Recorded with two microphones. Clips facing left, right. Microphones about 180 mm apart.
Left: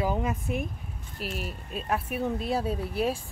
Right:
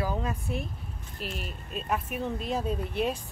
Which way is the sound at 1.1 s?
5° left (ahead or behind).